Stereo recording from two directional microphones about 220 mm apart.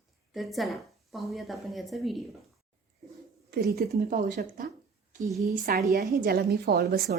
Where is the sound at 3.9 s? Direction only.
35° right (ahead or behind).